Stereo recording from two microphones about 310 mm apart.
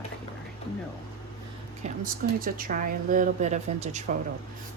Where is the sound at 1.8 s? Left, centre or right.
Right.